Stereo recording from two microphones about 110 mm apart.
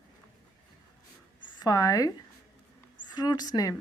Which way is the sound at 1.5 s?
35° left (ahead or behind).